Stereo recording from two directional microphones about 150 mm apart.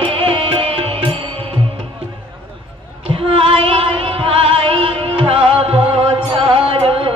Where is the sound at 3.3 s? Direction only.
35° right (ahead or behind).